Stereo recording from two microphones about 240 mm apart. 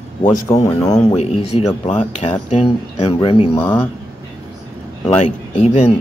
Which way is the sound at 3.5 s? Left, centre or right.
Centre.